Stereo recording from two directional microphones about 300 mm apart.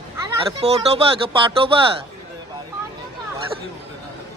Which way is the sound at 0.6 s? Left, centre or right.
Centre.